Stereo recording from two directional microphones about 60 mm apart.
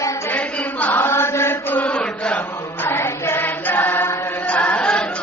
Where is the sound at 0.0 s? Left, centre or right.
Left.